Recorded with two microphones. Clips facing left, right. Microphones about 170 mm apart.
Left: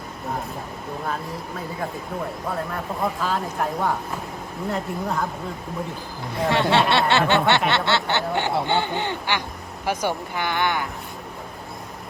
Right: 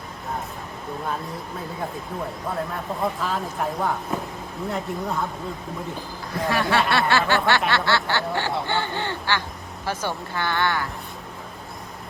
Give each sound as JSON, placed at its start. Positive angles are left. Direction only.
{"t": 3.2, "sound": "a woman's voice", "side_deg": 0}
{"t": 6.3, "sound": "speech", "side_deg": 25}